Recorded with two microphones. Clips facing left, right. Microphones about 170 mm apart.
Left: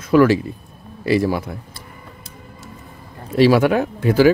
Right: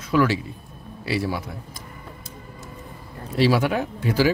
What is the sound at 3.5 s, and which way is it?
Speech, 60° left (ahead or behind).